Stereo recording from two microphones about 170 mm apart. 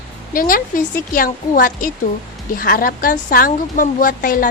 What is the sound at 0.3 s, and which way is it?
A woman's voice, 55° left (ahead or behind).